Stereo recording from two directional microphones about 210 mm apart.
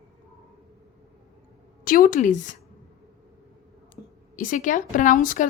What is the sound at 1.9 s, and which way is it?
Speech, 40° left (ahead or behind).